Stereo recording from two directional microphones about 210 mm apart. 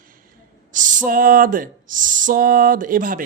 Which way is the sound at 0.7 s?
40° right (ahead or behind).